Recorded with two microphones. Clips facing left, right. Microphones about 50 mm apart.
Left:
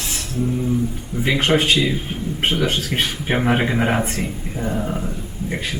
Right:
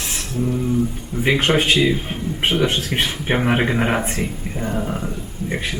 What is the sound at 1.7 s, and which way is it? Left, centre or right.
Speech, right.